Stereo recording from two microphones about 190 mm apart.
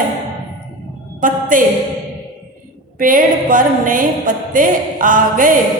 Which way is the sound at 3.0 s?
45° right (ahead or behind).